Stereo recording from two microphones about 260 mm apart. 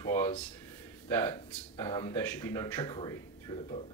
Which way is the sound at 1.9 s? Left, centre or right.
Centre.